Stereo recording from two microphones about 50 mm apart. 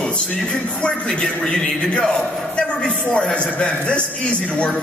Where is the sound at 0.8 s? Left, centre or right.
Centre.